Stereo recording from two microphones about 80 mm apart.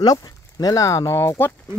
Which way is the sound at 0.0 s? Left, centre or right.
Left.